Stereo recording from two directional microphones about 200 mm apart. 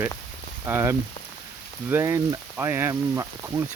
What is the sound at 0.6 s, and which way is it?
Speech, 10° right (ahead or behind).